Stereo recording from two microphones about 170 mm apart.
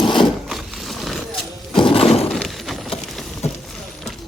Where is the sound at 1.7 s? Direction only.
30° left (ahead or behind).